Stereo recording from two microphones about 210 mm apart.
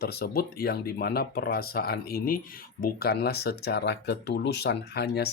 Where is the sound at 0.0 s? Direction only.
50° left (ahead or behind).